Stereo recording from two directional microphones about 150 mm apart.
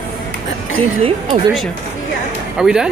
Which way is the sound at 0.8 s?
35° right (ahead or behind).